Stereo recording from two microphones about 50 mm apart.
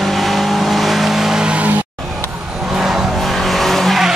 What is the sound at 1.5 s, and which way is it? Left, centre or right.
Music, right.